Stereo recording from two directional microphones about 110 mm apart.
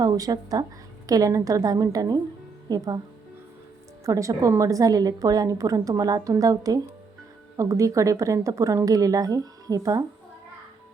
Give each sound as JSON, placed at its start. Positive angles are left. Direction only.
{"t": 0.0, "sound": "a woman's voice", "side_deg": -35}
{"t": 4.0, "sound": "a woman's voice", "side_deg": -30}